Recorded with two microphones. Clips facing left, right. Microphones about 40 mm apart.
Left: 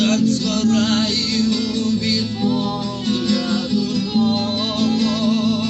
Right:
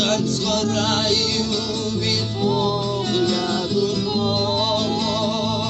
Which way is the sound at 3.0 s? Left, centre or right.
Right.